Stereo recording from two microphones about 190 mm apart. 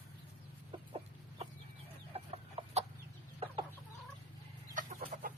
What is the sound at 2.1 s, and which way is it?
Chicken, 30° right (ahead or behind).